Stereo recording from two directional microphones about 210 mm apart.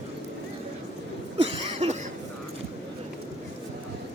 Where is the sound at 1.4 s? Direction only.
25° right (ahead or behind).